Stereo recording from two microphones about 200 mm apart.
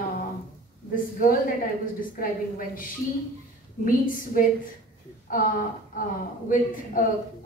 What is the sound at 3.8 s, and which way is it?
Speech, 45° left (ahead or behind).